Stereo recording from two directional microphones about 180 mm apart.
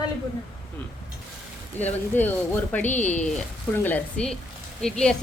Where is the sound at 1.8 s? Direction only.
10° left (ahead or behind).